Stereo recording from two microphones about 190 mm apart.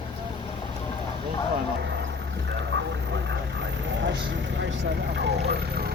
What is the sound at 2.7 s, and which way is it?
Vehicle, 80° right.